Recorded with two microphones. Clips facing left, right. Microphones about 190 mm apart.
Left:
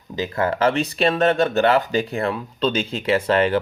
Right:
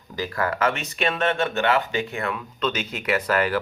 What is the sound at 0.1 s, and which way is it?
Speech, 20° left (ahead or behind).